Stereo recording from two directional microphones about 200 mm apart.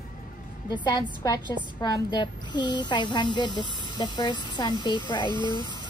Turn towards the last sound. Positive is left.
turn(degrees=20)  # may be behind; listen again after turning